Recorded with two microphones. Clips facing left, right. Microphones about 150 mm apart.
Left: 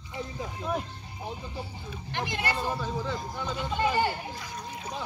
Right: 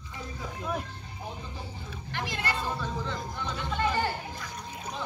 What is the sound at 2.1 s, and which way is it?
Speech, 20° left (ahead or behind).